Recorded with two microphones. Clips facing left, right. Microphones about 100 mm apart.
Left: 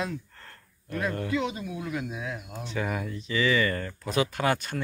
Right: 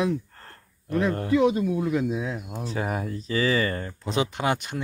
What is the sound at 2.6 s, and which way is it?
Speech, 35° right (ahead or behind).